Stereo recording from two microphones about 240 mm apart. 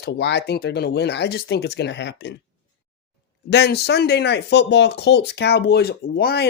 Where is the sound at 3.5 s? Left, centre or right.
Left.